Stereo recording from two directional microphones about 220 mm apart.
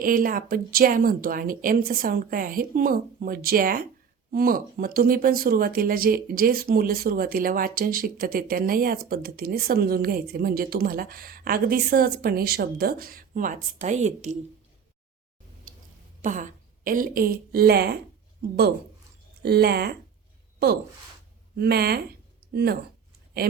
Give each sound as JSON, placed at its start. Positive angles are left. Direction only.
{"t": 0.0, "sound": "speech", "side_deg": -40}
{"t": 16.2, "sound": "a woman's voice", "side_deg": -35}
{"t": 19.4, "sound": "speech", "side_deg": -45}
{"t": 21.5, "sound": "speech", "side_deg": -45}